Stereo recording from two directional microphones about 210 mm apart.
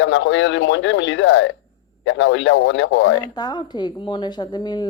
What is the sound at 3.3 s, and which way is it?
Speech, 20° left (ahead or behind).